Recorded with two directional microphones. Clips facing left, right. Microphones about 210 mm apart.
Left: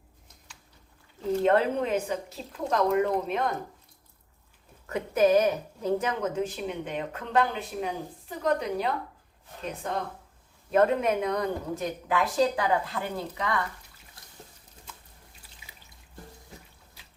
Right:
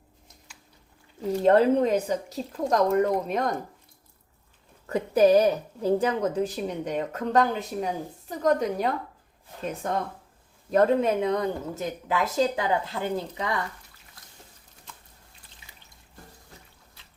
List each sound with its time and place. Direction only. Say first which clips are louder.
1.5 s a woman's voice: right 6 dB; 40° right (ahead or behind)
4.9 s a woman's voice: right 3 dB; 35° right (ahead or behind)
10.7 s speech: right 2 dB; 35° right (ahead or behind)